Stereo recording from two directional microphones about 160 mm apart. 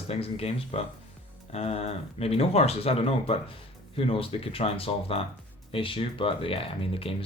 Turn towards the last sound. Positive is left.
turn(degrees=35)  # may be behind; listen again after turning